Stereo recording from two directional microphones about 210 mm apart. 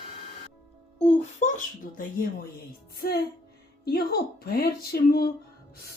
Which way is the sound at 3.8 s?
45° left (ahead or behind).